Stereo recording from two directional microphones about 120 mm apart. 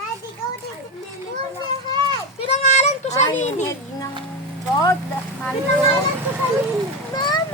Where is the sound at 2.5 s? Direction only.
65° left (ahead or behind).